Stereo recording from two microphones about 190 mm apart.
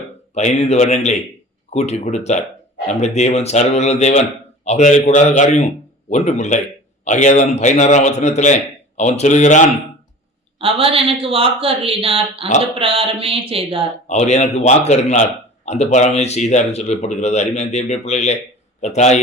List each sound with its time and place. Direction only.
0.3 s speech: 35° left (ahead or behind)
10.6 s speech: 30° right (ahead or behind)
14.1 s speech: 35° left (ahead or behind)